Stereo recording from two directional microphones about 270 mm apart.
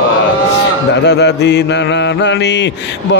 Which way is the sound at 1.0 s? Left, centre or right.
Left.